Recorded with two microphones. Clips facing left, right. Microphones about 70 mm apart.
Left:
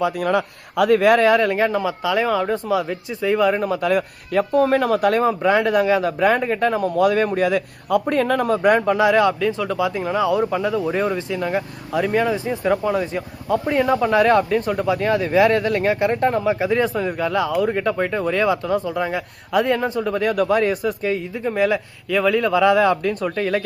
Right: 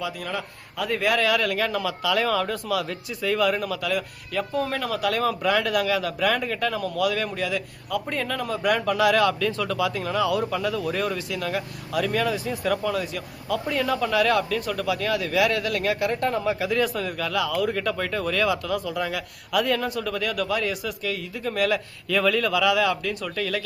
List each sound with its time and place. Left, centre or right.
0.0 s speech: left
5.2 s speech: left
8.8 s speech: left